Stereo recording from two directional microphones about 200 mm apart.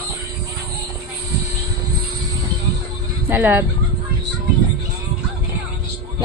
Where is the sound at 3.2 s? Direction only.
10° right (ahead or behind).